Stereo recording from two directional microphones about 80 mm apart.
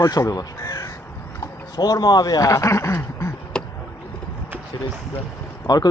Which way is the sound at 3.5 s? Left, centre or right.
Centre.